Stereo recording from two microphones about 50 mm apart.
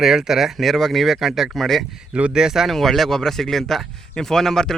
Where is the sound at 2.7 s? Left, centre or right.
Centre.